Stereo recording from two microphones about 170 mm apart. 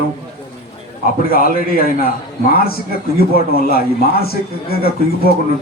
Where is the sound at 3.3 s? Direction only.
65° left (ahead or behind).